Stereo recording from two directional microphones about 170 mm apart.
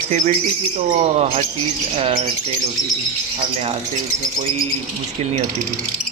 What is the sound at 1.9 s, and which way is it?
Speech, 35° right (ahead or behind).